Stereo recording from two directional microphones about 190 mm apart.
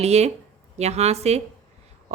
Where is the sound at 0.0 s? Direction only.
35° right (ahead or behind).